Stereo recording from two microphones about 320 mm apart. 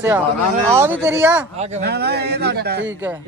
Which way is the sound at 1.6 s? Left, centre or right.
Right.